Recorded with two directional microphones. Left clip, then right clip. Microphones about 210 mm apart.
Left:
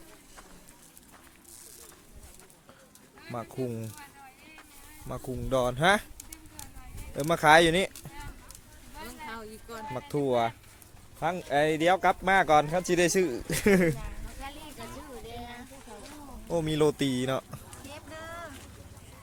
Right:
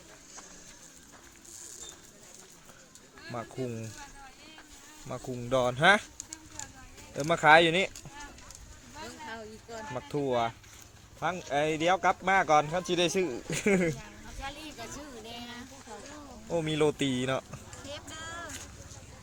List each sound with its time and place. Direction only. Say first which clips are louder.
3.3 s speech: left 2 dB; 15° left (ahead or behind)
5.0 s speech: left 1 dB; 10° left (ahead or behind)
7.2 s speech: left 1 dB; 15° left (ahead or behind)
9.9 s speech: left 2 dB; 10° left (ahead or behind)
10.2 s speech: left 3 dB; 30° left (ahead or behind)
14.4 s a sound: right 2 dB; 25° right (ahead or behind)
16.5 s speech: left 2 dB; 15° left (ahead or behind)
17.8 s clip-clop: right 2 dB; 15° right (ahead or behind)